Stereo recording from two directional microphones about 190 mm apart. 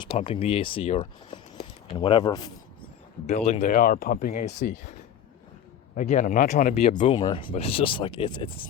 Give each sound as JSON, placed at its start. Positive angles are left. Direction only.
{"t": 0.1, "sound": "speech", "side_deg": 30}
{"t": 3.2, "sound": "speech", "side_deg": 35}
{"t": 6.0, "sound": "speech", "side_deg": 40}